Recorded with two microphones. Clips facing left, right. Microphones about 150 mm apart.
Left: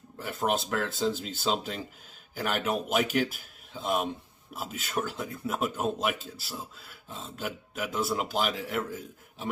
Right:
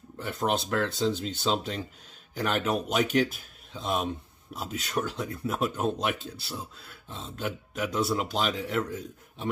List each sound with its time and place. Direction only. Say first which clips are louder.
0.2 s speech: right 1 dB; 5° left (ahead or behind)